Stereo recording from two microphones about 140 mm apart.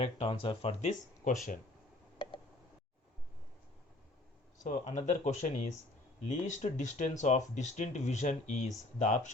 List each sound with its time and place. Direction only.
0.0 s speech: 40° left (ahead or behind); by 1.3 s 55° left (ahead or behind)
4.6 s speech: 60° left (ahead or behind)